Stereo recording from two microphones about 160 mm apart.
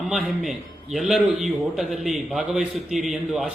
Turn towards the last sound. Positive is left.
turn(degrees=0)  # may be behind; listen again after turning